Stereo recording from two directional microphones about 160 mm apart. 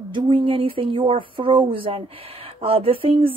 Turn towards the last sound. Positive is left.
turn(degrees=-35)  # may be behind; listen again after turning